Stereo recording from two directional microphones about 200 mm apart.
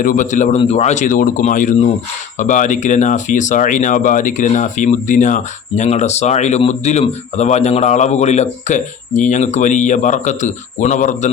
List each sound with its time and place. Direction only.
0.0 s speech: 40° left (ahead or behind)